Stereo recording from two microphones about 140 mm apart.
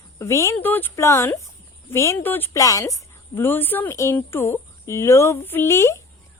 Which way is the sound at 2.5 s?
25° left (ahead or behind).